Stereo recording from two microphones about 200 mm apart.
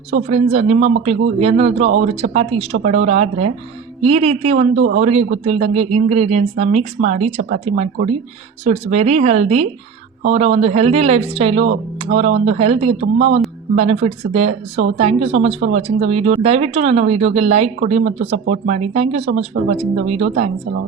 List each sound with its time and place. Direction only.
0.1 s speech: 30° right (ahead or behind)